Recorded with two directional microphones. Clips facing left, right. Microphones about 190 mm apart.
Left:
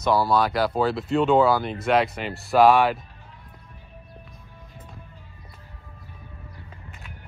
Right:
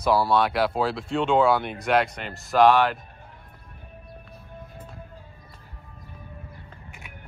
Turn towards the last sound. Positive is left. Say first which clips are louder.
# left 1 dB
turn(degrees=-15)  # may be behind; listen again after turning